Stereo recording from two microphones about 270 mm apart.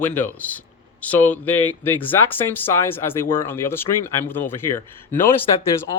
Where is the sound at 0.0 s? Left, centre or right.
Centre.